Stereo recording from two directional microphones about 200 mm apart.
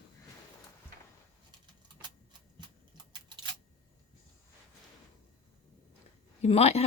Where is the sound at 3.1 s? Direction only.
25° right (ahead or behind).